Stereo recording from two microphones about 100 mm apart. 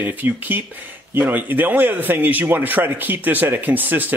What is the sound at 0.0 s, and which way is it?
Speech, 20° right (ahead or behind).